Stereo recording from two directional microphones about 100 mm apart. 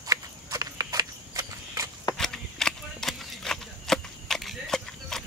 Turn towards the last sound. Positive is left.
turn(degrees=5)  # may be behind; listen again after turning